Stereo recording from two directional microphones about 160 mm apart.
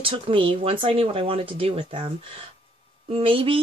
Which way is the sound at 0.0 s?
35° right (ahead or behind).